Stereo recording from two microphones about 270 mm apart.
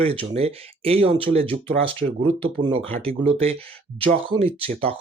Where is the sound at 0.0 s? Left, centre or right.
Right.